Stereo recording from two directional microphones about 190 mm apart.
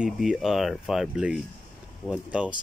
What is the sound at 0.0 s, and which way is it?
Speech, 5° right (ahead or behind).